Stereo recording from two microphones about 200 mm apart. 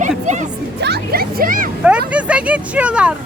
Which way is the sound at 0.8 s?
55° right (ahead or behind).